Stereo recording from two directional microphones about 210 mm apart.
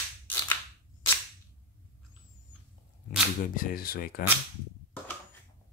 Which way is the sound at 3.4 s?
40° left (ahead or behind).